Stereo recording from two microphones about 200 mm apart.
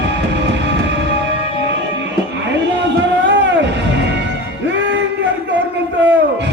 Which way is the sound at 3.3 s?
60° right (ahead or behind).